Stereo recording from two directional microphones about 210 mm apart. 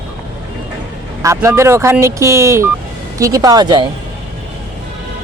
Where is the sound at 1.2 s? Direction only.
15° right (ahead or behind).